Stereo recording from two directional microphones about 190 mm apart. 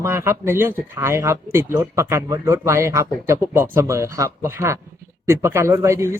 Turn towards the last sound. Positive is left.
turn(degrees=-15)  # may be behind; listen again after turning